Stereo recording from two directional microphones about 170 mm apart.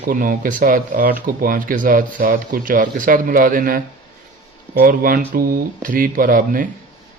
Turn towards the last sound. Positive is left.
turn(degrees=-55)  # may be behind; listen again after turning